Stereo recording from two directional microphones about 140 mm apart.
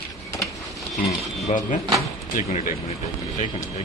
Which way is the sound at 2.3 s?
75° left (ahead or behind).